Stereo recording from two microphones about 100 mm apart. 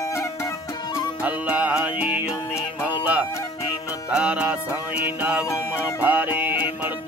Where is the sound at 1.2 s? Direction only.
15° right (ahead or behind).